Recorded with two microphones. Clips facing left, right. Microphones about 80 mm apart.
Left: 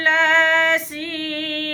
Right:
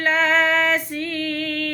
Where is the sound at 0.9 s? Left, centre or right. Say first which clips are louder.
Right 2 dB; left.